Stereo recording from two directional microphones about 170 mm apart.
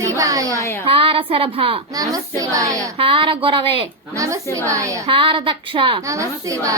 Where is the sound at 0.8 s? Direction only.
35° right (ahead or behind).